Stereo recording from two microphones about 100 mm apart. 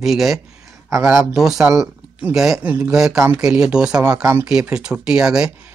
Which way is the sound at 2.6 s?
20° right (ahead or behind).